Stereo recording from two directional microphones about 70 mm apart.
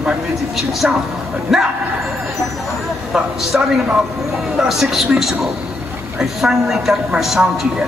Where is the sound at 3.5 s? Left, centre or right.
Centre.